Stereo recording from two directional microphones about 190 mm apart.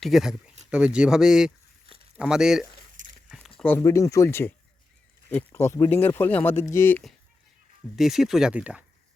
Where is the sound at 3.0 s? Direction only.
45° right (ahead or behind).